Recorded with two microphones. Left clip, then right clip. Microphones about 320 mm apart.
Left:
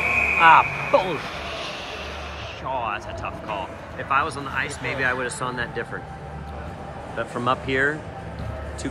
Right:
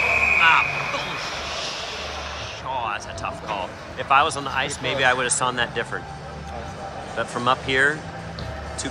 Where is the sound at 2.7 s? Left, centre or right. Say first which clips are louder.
Even; centre.